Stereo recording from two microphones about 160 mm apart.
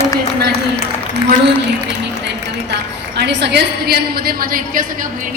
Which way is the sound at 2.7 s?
90° right.